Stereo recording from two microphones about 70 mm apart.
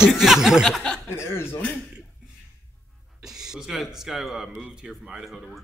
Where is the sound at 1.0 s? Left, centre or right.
Left.